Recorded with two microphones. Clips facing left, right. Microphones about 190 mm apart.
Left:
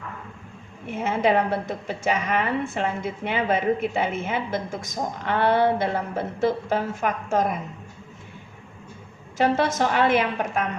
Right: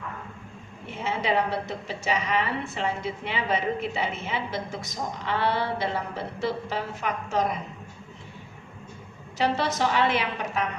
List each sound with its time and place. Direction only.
1.0 s a woman's voice: 50° left (ahead or behind)
9.4 s a woman's voice: 50° left (ahead or behind)